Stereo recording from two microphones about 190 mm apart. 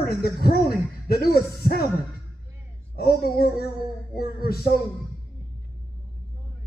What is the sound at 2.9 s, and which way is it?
Speech, 55° left (ahead or behind).